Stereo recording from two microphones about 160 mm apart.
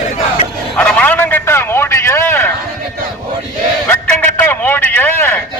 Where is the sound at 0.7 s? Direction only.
10° left (ahead or behind).